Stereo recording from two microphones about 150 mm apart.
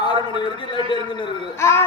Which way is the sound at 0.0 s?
30° left (ahead or behind).